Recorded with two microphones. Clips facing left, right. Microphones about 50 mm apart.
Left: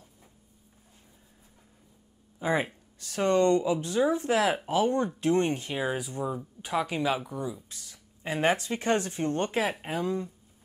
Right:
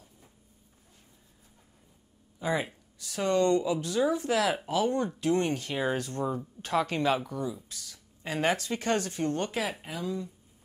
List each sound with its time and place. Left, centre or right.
2.3 s speech: left
5.7 s speech: centre
7.7 s speech: left